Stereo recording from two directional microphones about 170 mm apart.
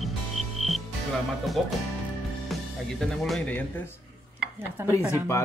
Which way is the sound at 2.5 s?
Centre (ahead or behind).